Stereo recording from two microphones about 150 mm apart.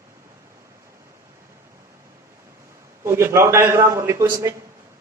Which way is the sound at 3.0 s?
15° right (ahead or behind).